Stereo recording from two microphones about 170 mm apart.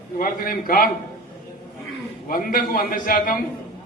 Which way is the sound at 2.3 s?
55° left (ahead or behind).